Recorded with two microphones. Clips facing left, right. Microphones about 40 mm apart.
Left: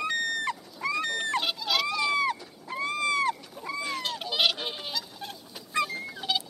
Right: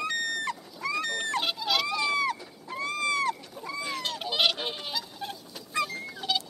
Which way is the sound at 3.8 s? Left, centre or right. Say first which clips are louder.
Even; centre.